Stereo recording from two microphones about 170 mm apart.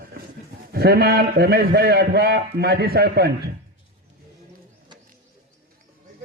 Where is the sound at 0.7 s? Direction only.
65° right (ahead or behind).